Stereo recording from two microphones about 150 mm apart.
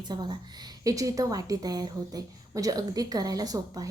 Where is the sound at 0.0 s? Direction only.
30° right (ahead or behind).